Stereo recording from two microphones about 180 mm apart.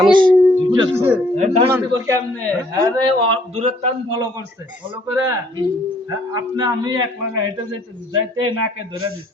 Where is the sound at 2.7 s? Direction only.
20° right (ahead or behind); by 3.9 s 35° right (ahead or behind).